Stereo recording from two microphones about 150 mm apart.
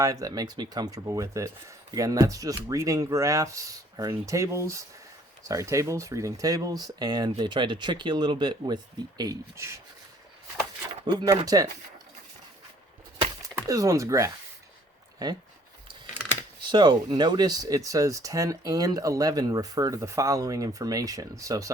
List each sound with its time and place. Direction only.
0.0 s speech: 25° right (ahead or behind)
11.0 s speech: 30° right (ahead or behind)
13.7 s speech: 20° right (ahead or behind)
16.6 s speech: 30° right (ahead or behind)